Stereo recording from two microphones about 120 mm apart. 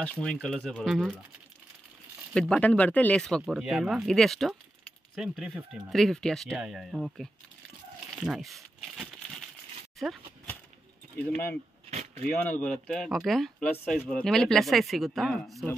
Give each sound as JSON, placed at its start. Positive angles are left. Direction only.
{"t": 0.0, "sound": "speech", "side_deg": 10}
{"t": 2.3, "sound": "speech", "side_deg": 5}
{"t": 11.3, "sound": "speech", "side_deg": 15}
{"t": 11.9, "sound": "a sound", "side_deg": -75}
{"t": 12.3, "sound": "speech", "side_deg": 10}